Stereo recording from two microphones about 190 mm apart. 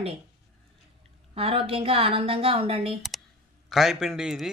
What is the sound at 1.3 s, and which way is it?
A woman's voice, 30° right (ahead or behind).